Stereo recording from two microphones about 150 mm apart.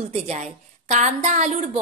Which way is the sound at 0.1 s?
50° right (ahead or behind).